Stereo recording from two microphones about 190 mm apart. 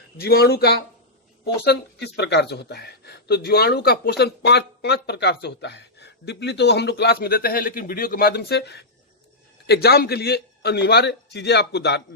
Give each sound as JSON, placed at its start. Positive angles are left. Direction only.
{"t": 0.2, "sound": "speech", "side_deg": 55}